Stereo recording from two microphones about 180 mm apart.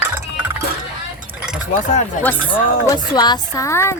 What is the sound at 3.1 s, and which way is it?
Speech, 25° left (ahead or behind).